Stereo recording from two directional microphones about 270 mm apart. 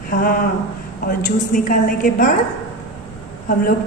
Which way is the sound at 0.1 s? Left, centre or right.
Left.